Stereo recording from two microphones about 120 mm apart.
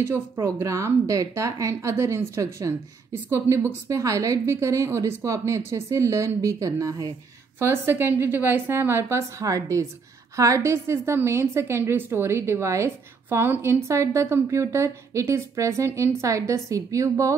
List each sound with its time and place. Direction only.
0.1 s a woman's voice: 20° right (ahead or behind)